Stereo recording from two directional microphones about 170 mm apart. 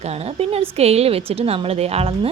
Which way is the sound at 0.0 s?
40° right (ahead or behind).